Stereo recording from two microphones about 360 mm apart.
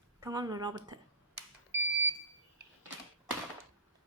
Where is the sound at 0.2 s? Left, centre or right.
Centre.